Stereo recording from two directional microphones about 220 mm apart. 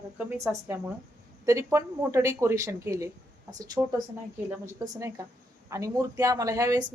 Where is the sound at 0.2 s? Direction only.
10° right (ahead or behind).